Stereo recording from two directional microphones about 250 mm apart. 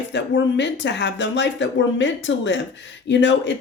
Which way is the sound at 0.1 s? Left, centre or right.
Left.